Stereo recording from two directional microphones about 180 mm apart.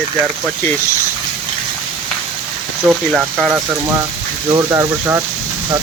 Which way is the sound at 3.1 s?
5° right (ahead or behind).